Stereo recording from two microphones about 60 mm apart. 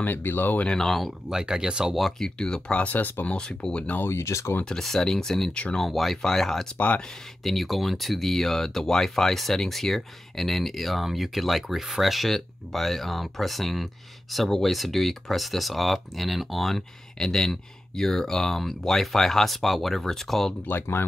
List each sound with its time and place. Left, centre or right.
0.0 s speech: left
0.7 s speech: centre
1.3 s speech: centre
2.0 s speech: centre; by 3.3 s left
3.3 s speech: centre
4.1 s speech: left
4.6 s speech: centre
5.5 s speech: centre
5.8 s speech: centre